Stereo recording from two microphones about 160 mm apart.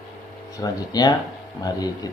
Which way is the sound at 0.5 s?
25° left (ahead or behind).